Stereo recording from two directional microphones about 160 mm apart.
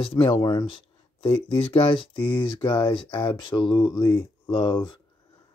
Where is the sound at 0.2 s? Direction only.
25° left (ahead or behind).